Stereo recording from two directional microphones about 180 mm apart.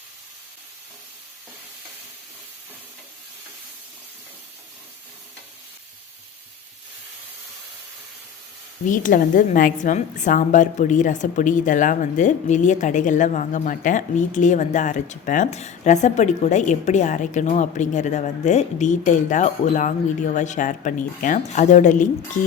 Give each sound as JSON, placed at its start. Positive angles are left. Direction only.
{"t": 8.9, "sound": "a woman's voice", "side_deg": 45}